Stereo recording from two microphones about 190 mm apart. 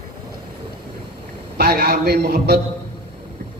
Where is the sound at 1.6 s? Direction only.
55° right (ahead or behind).